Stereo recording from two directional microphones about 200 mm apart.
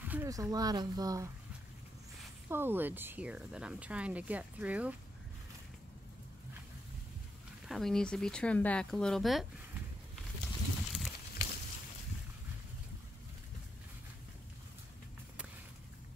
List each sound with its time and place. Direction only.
0.0 s speech: 10° right (ahead or behind)
2.5 s speech: 10° right (ahead or behind)
7.6 s speech: centre (ahead or behind)
10.4 s a sound: centre (ahead or behind)